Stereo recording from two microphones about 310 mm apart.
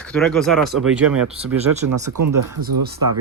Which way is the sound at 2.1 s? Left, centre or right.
Right.